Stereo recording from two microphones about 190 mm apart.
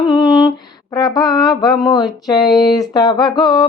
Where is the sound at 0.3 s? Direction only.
15° left (ahead or behind).